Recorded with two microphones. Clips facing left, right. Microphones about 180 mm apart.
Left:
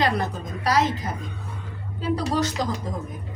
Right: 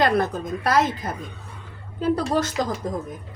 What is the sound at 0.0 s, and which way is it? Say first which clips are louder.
Speech: right 4 dB; 50° right (ahead or behind).